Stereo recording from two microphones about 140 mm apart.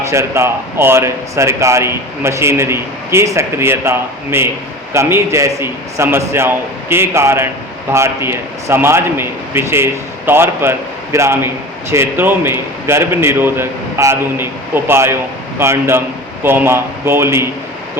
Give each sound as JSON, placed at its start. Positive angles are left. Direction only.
{"t": 0.1, "sound": "a man's voice", "side_deg": -20}